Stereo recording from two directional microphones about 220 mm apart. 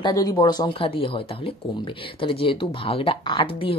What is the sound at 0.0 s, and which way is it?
Speech, 15° left (ahead or behind).